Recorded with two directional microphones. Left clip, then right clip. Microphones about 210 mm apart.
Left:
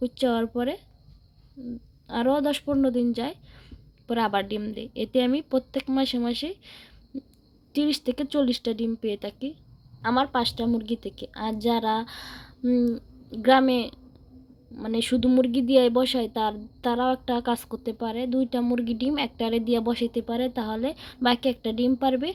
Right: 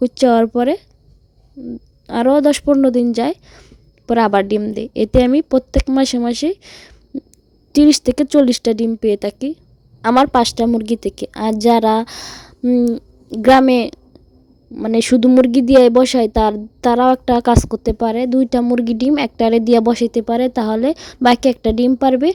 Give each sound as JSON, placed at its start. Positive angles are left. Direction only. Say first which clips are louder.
{"t": 0.0, "sound": "speech", "louder": "right 13 dB", "side_deg": -50}
{"t": 2.0, "sound": "speech", "louder": "right 11 dB", "side_deg": -50}